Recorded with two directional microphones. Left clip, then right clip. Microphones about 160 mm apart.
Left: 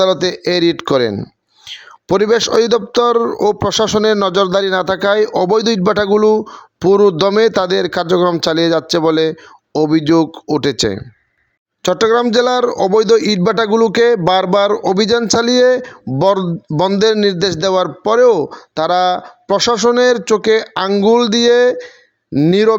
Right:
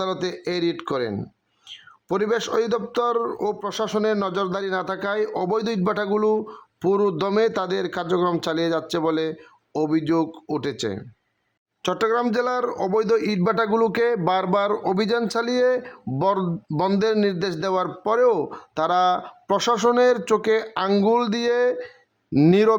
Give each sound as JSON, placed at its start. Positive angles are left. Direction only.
{"t": 0.0, "sound": "a man's voice", "side_deg": 35}
{"t": 22.3, "sound": "speech", "side_deg": 5}